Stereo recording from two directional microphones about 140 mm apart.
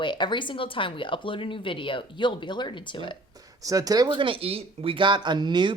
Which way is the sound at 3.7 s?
25° right (ahead or behind).